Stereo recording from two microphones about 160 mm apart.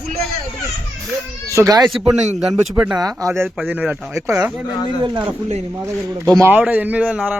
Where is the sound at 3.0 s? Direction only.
20° right (ahead or behind).